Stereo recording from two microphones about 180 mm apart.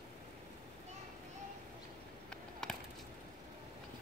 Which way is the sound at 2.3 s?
5° left (ahead or behind).